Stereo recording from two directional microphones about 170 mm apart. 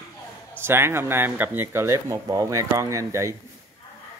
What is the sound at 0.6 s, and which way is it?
Speech, 15° right (ahead or behind).